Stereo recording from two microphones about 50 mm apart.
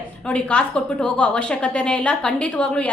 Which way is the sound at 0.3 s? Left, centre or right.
Left.